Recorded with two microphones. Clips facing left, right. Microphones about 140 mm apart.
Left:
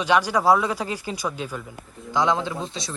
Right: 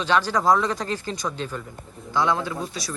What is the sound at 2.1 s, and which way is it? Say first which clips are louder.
Speech: left 1 dB; 15° left (ahead or behind).